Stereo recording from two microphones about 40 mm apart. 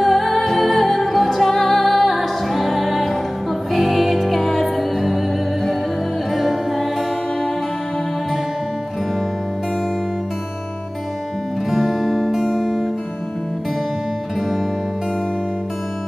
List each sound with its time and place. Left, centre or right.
0.0 s music: centre
6.3 s music: centre
11.7 s music: centre